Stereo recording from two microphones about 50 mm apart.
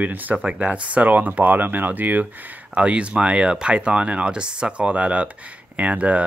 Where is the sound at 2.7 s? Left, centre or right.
Right.